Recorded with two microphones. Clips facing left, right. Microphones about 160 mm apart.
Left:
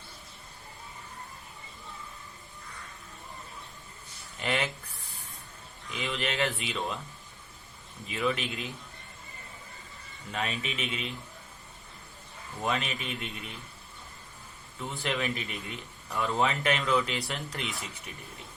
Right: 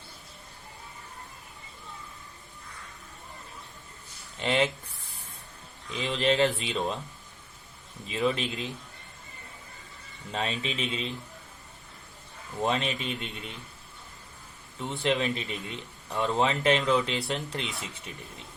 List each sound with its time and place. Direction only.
4.4 s speech: 25° right (ahead or behind)
5.9 s speech: 30° right (ahead or behind)
8.0 s speech: 30° right (ahead or behind)
10.3 s speech: 30° right (ahead or behind)
12.6 s speech: 30° right (ahead or behind)
15.0 s speech: 25° right (ahead or behind)